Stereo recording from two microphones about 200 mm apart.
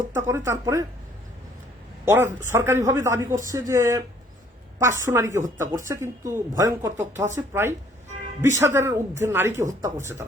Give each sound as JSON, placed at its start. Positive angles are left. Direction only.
{"t": 0.1, "sound": "speech", "side_deg": -10}
{"t": 2.0, "sound": "speech", "side_deg": -10}
{"t": 5.0, "sound": "speech", "side_deg": -15}